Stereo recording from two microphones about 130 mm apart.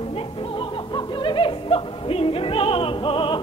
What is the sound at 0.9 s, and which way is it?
Music, 40° left (ahead or behind).